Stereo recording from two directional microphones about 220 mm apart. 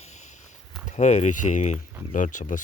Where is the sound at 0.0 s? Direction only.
30° left (ahead or behind).